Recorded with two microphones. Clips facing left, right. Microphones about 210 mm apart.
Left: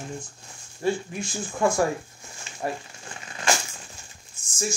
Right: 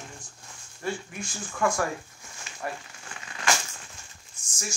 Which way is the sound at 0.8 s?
25° left (ahead or behind).